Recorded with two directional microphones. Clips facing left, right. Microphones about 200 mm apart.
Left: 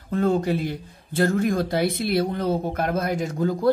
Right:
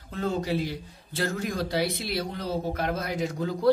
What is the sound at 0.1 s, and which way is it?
A man's voice, 55° left (ahead or behind).